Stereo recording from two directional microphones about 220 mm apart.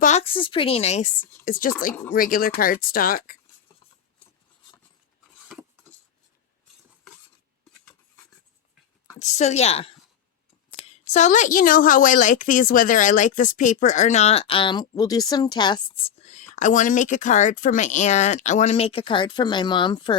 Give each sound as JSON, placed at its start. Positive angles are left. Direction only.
{"t": 0.0, "sound": "a woman's voice", "side_deg": 30}
{"t": 9.1, "sound": "a woman's voice", "side_deg": 30}